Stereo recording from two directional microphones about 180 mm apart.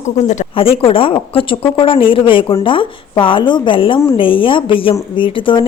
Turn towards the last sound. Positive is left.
turn(degrees=25)  # may be behind; listen again after turning